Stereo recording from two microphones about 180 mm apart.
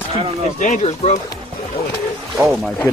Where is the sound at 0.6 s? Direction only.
40° left (ahead or behind).